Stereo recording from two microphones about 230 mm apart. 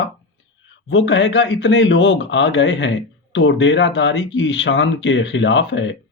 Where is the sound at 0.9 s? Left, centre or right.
Left.